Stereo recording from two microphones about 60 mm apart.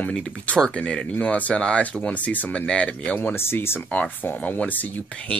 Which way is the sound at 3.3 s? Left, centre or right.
Left.